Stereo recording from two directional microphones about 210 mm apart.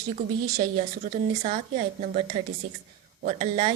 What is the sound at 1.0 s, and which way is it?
A woman's voice, 30° right (ahead or behind).